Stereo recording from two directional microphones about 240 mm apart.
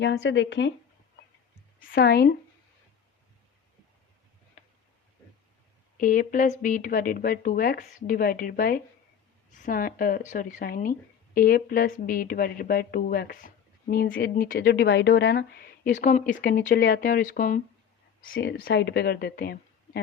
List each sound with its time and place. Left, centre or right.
0.0 s speech: left
1.8 s speech: left
4.6 s a sound: left
6.0 s speech: left